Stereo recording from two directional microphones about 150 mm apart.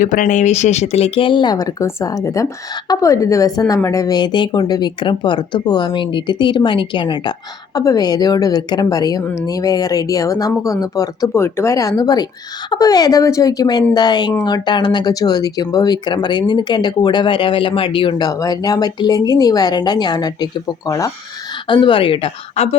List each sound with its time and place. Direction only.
0.0 s speech: 60° left (ahead or behind); by 22.7 s 40° left (ahead or behind)